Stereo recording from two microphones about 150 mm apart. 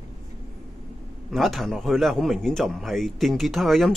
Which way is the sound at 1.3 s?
Centre (ahead or behind).